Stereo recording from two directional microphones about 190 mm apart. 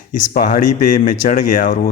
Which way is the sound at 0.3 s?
45° left (ahead or behind).